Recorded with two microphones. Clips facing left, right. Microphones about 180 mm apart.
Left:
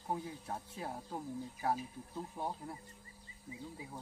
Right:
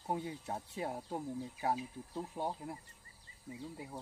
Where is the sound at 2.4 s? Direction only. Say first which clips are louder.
Right 2 dB; 20° right (ahead or behind).